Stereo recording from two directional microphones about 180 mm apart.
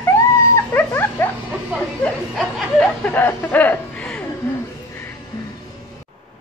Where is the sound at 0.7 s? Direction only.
15° left (ahead or behind).